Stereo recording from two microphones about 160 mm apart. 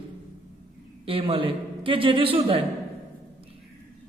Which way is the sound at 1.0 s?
35° right (ahead or behind).